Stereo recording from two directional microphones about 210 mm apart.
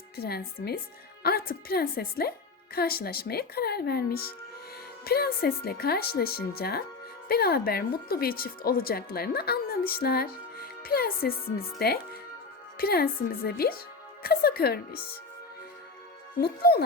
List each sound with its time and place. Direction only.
0.2 s speech: 50° left (ahead or behind)
16.4 s speech: 50° left (ahead or behind)